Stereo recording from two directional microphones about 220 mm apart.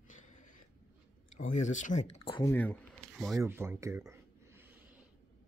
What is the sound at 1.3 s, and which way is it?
Speech, 35° left (ahead or behind).